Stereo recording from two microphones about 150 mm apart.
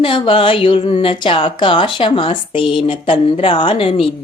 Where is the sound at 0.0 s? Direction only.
35° left (ahead or behind).